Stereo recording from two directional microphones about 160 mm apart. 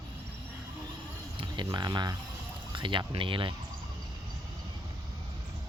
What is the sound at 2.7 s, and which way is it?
Speech, 30° right (ahead or behind).